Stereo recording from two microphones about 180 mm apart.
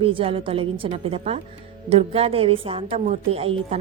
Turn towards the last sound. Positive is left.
turn(degrees=-35)  # may be behind; listen again after turning